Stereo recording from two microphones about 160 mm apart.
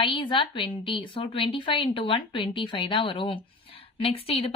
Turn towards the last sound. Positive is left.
turn(degrees=35)  # may be behind; listen again after turning